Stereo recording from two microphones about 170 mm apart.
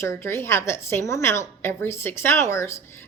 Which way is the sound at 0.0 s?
15° left (ahead or behind).